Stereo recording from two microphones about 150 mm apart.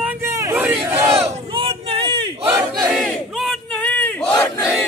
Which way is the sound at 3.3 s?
Centre (ahead or behind).